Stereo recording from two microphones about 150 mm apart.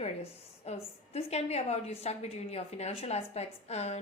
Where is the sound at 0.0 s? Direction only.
45° left (ahead or behind).